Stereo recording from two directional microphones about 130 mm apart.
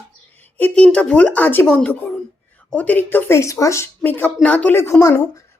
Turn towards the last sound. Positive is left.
turn(degrees=20)  # may be behind; listen again after turning